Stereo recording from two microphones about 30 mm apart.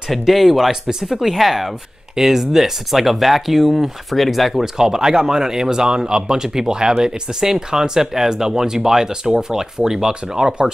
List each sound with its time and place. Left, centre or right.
0.5 s speech: centre
4.6 s speech: centre